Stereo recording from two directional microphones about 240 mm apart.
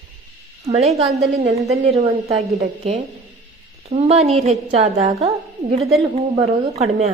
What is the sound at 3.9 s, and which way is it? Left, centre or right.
A woman's voice, right.